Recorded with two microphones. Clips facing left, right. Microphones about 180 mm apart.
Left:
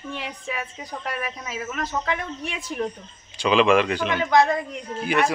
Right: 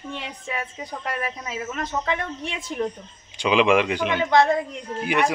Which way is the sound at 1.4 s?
25° right (ahead or behind).